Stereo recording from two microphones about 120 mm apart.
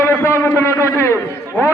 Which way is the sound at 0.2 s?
20° left (ahead or behind).